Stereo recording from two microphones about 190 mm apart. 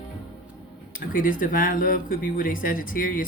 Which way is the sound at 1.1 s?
45° left (ahead or behind).